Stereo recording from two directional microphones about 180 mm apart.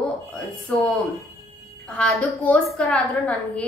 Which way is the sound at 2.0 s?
5° left (ahead or behind).